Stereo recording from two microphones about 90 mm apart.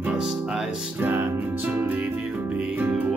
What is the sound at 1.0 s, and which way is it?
Music, 20° right (ahead or behind).